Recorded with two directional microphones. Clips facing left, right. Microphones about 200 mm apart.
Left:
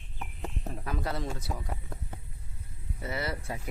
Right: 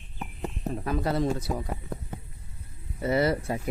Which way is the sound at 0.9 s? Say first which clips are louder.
Right 8 dB; 35° right (ahead or behind).